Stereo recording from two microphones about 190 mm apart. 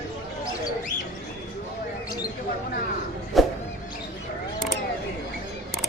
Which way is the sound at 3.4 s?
Centre (ahead or behind).